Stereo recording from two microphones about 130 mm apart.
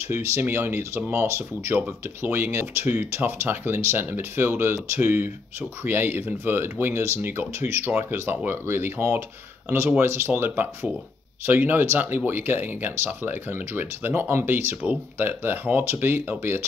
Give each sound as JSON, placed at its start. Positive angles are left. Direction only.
{"t": 0.1, "sound": "speech", "side_deg": -20}